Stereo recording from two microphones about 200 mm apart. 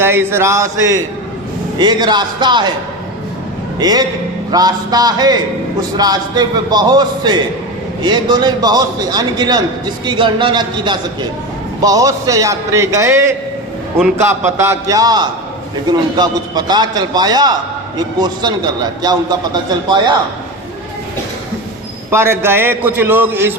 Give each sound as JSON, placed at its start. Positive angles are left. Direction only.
{"t": 0.0, "sound": "a man's voice", "side_deg": -10}
{"t": 3.8, "sound": "a man's voice", "side_deg": -20}
{"t": 22.1, "sound": "a man's voice", "side_deg": -10}